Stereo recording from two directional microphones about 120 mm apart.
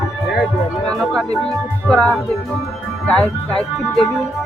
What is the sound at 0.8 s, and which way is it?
Speech, 5° left (ahead or behind).